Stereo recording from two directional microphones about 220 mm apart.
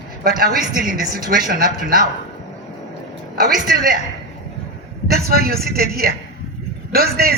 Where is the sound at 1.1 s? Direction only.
40° right (ahead or behind).